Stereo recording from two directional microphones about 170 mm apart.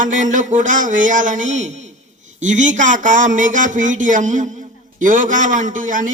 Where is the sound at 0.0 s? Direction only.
50° right (ahead or behind).